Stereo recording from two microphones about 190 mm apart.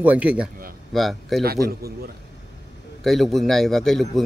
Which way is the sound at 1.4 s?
55° right (ahead or behind).